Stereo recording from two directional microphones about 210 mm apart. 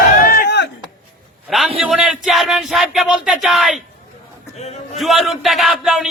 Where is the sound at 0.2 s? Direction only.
45° left (ahead or behind).